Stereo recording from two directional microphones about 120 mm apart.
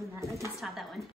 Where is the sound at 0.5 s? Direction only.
Centre (ahead or behind).